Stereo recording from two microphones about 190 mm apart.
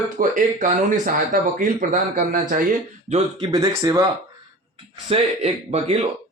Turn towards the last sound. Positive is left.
turn(degrees=-35)  # may be behind; listen again after turning